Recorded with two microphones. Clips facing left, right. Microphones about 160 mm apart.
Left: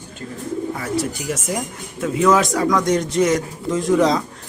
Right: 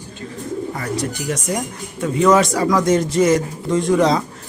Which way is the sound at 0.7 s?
5° left (ahead or behind).